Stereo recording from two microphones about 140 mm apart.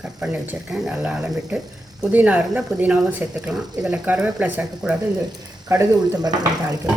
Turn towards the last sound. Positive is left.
turn(degrees=-30)  # may be behind; listen again after turning